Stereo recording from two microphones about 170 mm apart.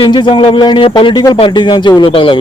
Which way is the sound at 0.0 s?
30° left (ahead or behind).